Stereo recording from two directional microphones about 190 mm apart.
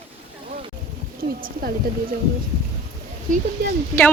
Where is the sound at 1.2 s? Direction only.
50° right (ahead or behind).